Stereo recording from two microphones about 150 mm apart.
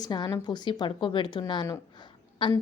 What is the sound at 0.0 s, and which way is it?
A woman's voice, 25° left (ahead or behind).